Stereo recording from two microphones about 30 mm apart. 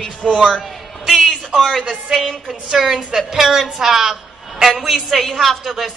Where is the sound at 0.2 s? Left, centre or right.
Centre.